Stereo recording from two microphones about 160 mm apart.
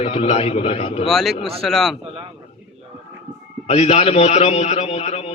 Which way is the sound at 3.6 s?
40° left (ahead or behind).